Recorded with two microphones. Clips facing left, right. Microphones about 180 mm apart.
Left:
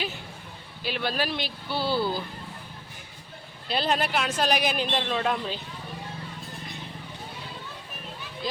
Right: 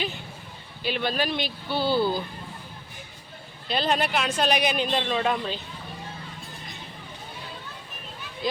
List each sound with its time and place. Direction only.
0.9 s a man's voice: 5° left (ahead or behind)
3.7 s a man's voice: centre (ahead or behind)